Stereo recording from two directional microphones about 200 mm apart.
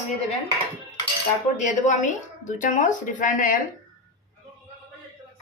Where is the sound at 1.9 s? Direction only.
40° left (ahead or behind).